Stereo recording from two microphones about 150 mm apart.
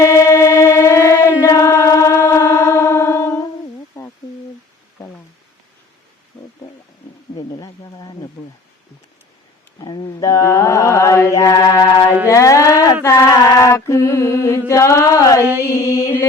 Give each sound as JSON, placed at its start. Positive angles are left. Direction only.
{"t": 0.0, "sound": "music", "side_deg": 20}
{"t": 1.2, "sound": "singing", "side_deg": 20}
{"t": 3.9, "sound": "a sound", "side_deg": 15}
{"t": 7.3, "sound": "wild animals", "side_deg": 30}
{"t": 9.8, "sound": "mantra", "side_deg": 30}
{"t": 12.3, "sound": "a sound", "side_deg": 20}
{"t": 15.6, "sound": "mantra", "side_deg": 20}